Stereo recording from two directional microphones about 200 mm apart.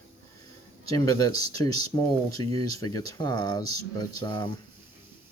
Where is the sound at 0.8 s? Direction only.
20° left (ahead or behind).